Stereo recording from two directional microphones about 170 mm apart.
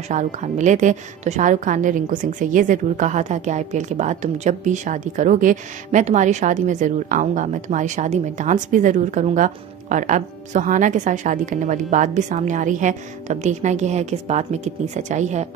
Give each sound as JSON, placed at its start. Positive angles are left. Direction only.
{"t": 0.1, "sound": "a woman's voice", "side_deg": -45}